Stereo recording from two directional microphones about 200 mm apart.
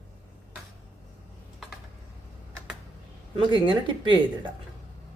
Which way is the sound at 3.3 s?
25° right (ahead or behind).